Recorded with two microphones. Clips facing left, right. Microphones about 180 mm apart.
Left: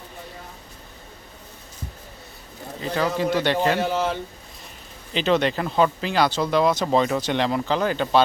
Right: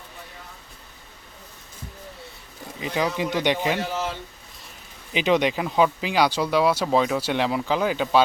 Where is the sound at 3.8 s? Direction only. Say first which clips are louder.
Left 5 dB; 55° left (ahead or behind).